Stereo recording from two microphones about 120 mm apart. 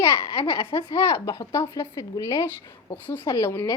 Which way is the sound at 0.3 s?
50° left (ahead or behind).